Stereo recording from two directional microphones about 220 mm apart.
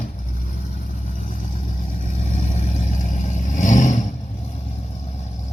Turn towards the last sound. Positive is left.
turn(degrees=35)  # may be behind; listen again after turning